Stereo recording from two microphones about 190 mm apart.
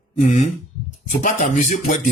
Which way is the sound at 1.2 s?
45° left (ahead or behind).